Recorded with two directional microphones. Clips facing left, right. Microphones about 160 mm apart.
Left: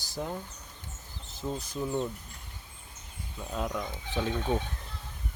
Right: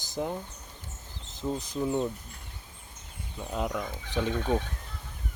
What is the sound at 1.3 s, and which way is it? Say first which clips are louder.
Speech: right 3 dB; 15° right (ahead or behind).